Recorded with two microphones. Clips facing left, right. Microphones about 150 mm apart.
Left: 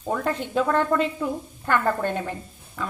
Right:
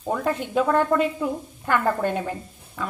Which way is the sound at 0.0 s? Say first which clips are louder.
Right 1 dB; 10° right (ahead or behind).